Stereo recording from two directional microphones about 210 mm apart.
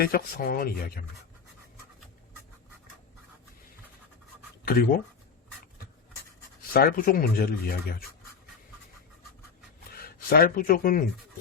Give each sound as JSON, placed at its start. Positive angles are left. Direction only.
{"t": 0.0, "sound": "speech", "side_deg": 45}
{"t": 4.6, "sound": "speech", "side_deg": 45}
{"t": 6.7, "sound": "speech", "side_deg": 45}
{"t": 9.9, "sound": "speech", "side_deg": 45}